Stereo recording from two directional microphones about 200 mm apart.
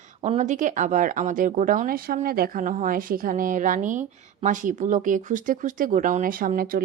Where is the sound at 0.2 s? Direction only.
35° right (ahead or behind).